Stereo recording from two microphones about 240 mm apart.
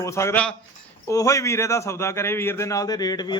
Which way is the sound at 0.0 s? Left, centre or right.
Centre.